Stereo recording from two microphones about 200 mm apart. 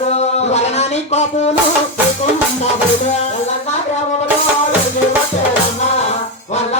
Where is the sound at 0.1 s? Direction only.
35° left (ahead or behind).